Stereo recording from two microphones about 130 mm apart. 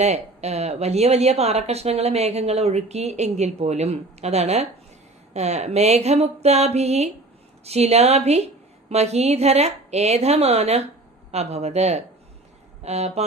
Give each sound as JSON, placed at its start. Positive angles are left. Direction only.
{"t": 0.0, "sound": "speech", "side_deg": -60}